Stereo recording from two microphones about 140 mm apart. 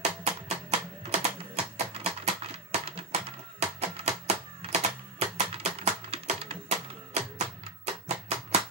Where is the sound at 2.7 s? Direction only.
50° right (ahead or behind).